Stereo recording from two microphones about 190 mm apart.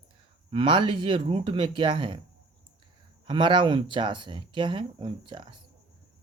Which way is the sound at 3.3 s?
25° right (ahead or behind).